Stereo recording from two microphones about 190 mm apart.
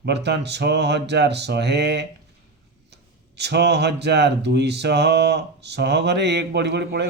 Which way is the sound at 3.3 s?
60° right (ahead or behind).